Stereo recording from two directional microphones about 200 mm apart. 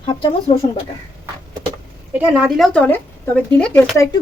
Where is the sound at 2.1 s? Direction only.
5° right (ahead or behind).